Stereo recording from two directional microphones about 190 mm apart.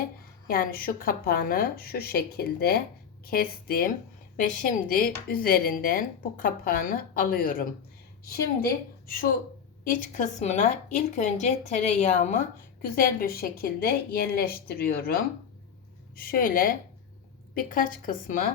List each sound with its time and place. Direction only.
0.4 s speech: 50° left (ahead or behind)
9.8 s a woman's voice: 45° left (ahead or behind)
12.8 s speech: 50° left (ahead or behind)
16.1 s speech: 50° left (ahead or behind)